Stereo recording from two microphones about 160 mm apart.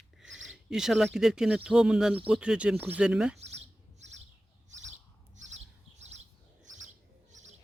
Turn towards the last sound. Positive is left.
turn(degrees=-45)  # may be behind; listen again after turning